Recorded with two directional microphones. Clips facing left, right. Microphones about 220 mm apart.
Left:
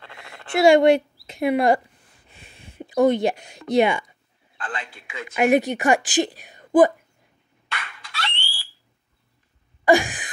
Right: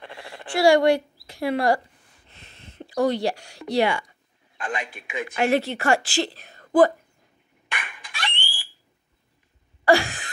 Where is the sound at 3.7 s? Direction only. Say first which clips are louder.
Left 3 dB; 20° left (ahead or behind).